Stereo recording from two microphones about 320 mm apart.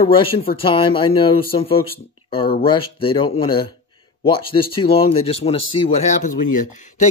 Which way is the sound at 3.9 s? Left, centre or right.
Centre.